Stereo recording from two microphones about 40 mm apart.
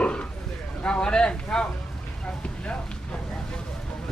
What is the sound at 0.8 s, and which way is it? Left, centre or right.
Cattle, left.